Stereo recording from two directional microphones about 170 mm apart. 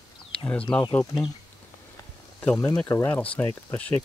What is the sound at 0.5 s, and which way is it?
Speech, 5° left (ahead or behind).